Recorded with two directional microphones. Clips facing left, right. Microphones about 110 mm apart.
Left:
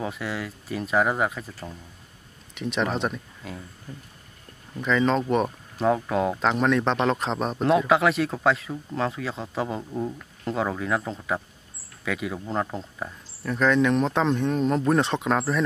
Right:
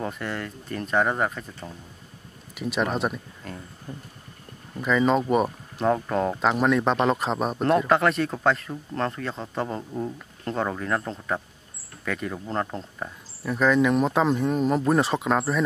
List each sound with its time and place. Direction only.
0.0 s speech: centre (ahead or behind)
2.5 s speech: 5° right (ahead or behind)
3.9 s a sound: 20° right (ahead or behind)
4.7 s speech: 5° right (ahead or behind)